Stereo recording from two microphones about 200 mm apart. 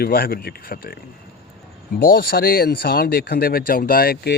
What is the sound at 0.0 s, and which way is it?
Speech, 45° left (ahead or behind).